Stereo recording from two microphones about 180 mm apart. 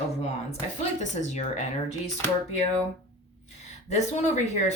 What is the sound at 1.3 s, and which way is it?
Speech, 40° left (ahead or behind).